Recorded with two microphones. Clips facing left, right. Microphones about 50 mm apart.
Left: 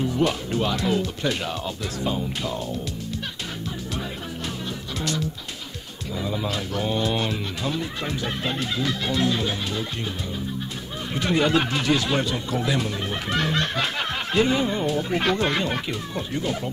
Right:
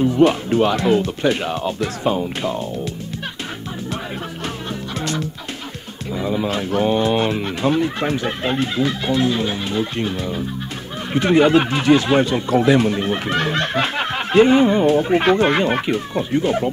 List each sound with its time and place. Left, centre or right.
0.0 s speech: right
4.9 s music: right
6.1 s speech: right
9.9 s fowl: right
11.1 s speech: right